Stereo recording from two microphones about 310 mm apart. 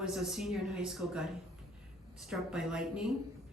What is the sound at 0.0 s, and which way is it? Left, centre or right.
Speech, centre.